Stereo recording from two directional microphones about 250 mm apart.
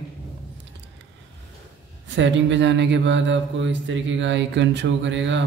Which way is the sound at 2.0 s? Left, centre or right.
Right.